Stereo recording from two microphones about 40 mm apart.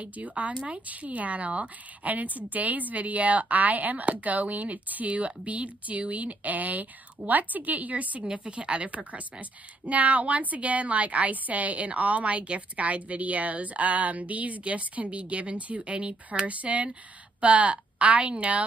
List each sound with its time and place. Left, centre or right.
0.1 s a woman's voice: right
8.2 s a woman's voice: right